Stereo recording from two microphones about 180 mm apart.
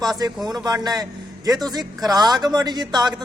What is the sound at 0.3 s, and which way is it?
Speech, centre (ahead or behind).